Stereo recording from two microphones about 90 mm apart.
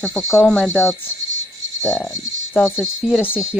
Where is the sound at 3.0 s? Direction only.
10° right (ahead or behind).